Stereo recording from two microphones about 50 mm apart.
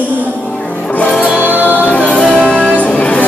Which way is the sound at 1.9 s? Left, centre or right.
Left.